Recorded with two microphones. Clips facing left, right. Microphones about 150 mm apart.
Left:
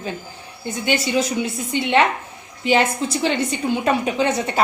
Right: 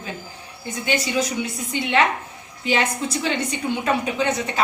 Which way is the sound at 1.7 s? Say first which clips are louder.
Left 2 dB; 30° left (ahead or behind).